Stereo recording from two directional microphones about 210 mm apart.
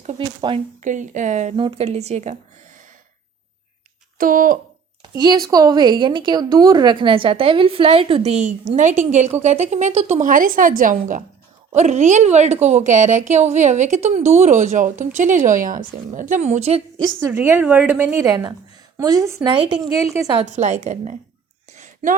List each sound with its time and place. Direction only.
0.2 s a woman's voice: 20° right (ahead or behind)
0.8 s a woman's voice: 35° right (ahead or behind)
4.2 s a woman's voice: 40° right (ahead or behind)
5.1 s a woman's voice: 20° right (ahead or behind)
17.2 s a woman's voice: 10° right (ahead or behind)
20.6 s a woman's voice: 35° right (ahead or behind)
21.7 s a sound: 35° right (ahead or behind)